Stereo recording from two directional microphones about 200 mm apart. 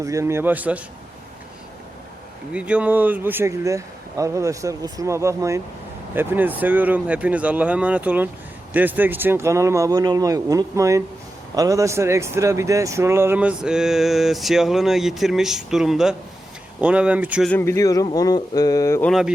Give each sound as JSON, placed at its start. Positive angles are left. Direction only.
{"t": 0.0, "sound": "speech", "side_deg": -15}
{"t": 2.5, "sound": "speech", "side_deg": -5}
{"t": 17.5, "sound": "speech", "side_deg": 10}